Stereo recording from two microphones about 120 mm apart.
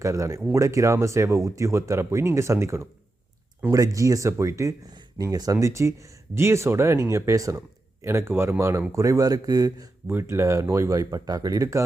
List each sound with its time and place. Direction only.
0.0 s speech: 25° right (ahead or behind)
10.1 s speech: 20° right (ahead or behind)